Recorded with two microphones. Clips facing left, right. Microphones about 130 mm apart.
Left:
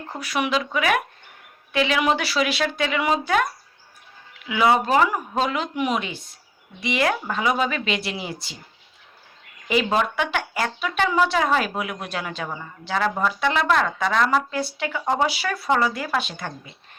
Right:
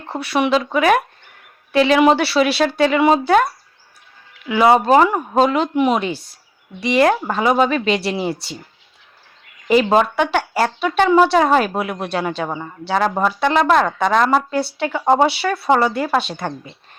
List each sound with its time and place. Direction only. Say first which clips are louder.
0.2 s speech: right 7 dB; 30° right (ahead or behind)
9.6 s speech: right 7 dB; 40° right (ahead or behind)
12.5 s speech: right 7 dB; 65° right (ahead or behind)
12.9 s speech: right 5 dB; 40° right (ahead or behind)
15.3 s speech: right 6 dB; 30° right (ahead or behind)